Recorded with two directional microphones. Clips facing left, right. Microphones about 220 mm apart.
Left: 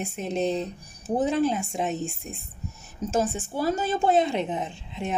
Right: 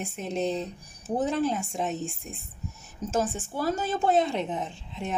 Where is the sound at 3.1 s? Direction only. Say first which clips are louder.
Left 2 dB; 15° left (ahead or behind).